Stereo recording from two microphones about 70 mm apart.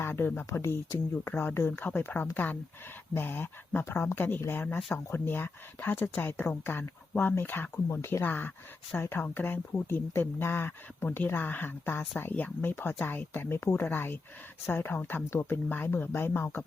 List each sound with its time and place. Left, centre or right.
0.0 s speech: left